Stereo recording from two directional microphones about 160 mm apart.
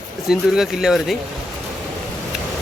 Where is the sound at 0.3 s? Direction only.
5° right (ahead or behind).